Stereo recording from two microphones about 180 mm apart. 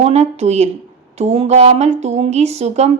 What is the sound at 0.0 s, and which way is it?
A woman's voice, 35° right (ahead or behind).